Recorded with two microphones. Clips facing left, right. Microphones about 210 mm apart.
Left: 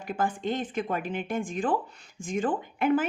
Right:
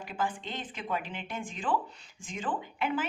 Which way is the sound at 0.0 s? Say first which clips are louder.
Left 5 dB; 50° left (ahead or behind).